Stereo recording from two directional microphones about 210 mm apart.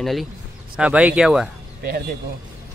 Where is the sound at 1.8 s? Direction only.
50° right (ahead or behind).